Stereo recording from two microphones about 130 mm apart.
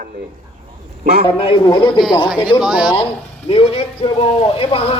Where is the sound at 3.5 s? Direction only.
45° left (ahead or behind).